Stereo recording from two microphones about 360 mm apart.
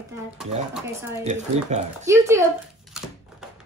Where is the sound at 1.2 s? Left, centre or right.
Centre.